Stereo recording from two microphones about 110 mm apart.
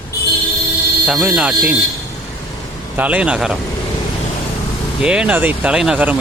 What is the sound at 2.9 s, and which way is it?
Speech, 10° right (ahead or behind).